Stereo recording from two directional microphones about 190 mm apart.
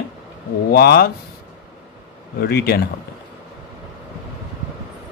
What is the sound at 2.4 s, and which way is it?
Speech, 55° left (ahead or behind).